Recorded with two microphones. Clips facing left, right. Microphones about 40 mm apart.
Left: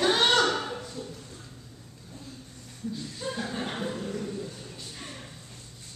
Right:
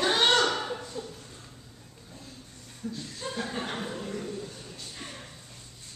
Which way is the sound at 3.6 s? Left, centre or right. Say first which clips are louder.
Left 2 dB; centre.